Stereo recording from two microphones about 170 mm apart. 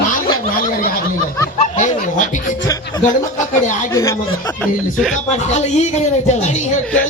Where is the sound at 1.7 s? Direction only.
45° left (ahead or behind).